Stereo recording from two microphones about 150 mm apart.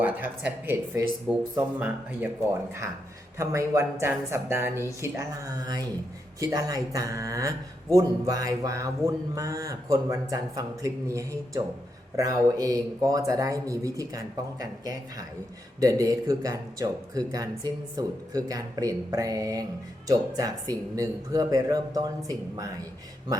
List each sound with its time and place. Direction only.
0.0 s speech: 10° right (ahead or behind)
1.3 s speech: centre (ahead or behind)
3.3 s speech: 20° right (ahead or behind)